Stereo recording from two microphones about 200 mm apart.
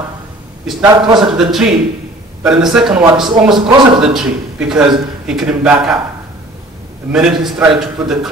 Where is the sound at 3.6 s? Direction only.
25° right (ahead or behind).